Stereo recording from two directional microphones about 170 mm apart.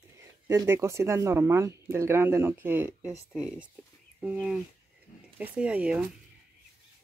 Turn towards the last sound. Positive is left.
turn(degrees=-5)  # may be behind; listen again after turning